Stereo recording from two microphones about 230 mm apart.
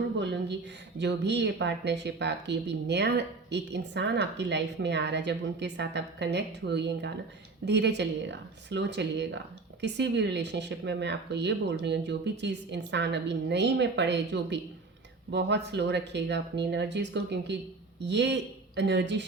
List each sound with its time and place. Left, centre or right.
0.2 s speech: right